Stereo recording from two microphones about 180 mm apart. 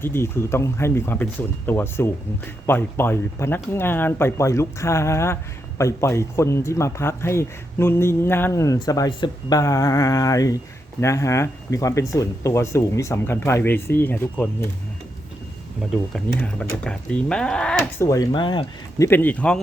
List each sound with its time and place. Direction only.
0.0 s speech: 15° left (ahead or behind)
16.4 s speech: 5° left (ahead or behind)
18.0 s speech: 20° left (ahead or behind)
19.0 s speech: 10° left (ahead or behind)